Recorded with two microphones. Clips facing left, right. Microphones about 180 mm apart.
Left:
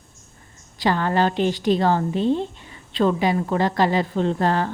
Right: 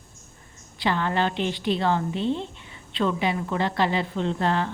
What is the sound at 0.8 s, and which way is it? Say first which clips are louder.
Speech: left 4 dB; 40° left (ahead or behind).